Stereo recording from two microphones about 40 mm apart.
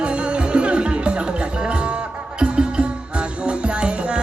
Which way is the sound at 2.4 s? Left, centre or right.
Right.